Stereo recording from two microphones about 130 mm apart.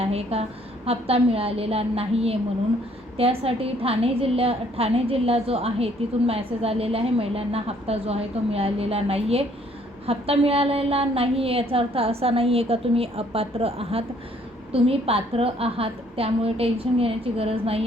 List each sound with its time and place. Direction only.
0.0 s a woman's voice: 50° right (ahead or behind)